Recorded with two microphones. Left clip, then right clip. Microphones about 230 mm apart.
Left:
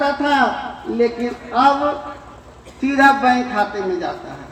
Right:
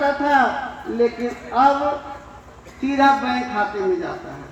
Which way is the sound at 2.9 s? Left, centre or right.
Left.